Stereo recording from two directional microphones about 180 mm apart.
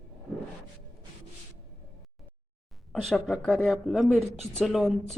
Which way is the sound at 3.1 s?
Centre (ahead or behind).